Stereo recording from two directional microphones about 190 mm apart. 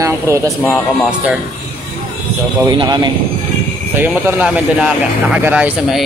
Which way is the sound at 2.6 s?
20° right (ahead or behind).